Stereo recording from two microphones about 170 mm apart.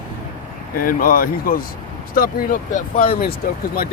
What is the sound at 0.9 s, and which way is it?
Speech, 55° left (ahead or behind).